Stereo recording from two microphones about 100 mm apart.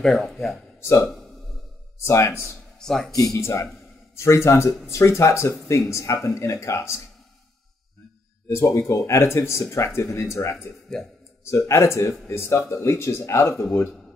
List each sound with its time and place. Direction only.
0.0 s speech: centre (ahead or behind)
0.7 s speech: 30° left (ahead or behind)
2.0 s speech: 30° left (ahead or behind)
2.8 s speech: 5° left (ahead or behind)
3.3 s speech: 25° left (ahead or behind)
8.5 s speech: 30° left (ahead or behind)
10.5 s speech: 5° left (ahead or behind)
11.5 s speech: 30° left (ahead or behind)